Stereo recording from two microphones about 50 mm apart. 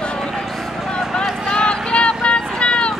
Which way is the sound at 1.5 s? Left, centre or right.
Centre.